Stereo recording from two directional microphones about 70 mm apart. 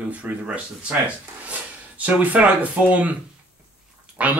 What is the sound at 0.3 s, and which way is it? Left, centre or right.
Speech, centre.